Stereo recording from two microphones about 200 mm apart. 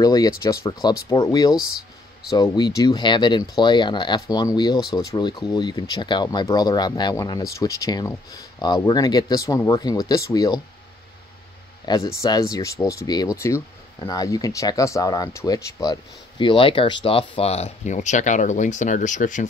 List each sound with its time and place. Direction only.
0.0 s speech: 20° left (ahead or behind)
11.8 s speech: 20° left (ahead or behind); by 19.4 s 40° left (ahead or behind)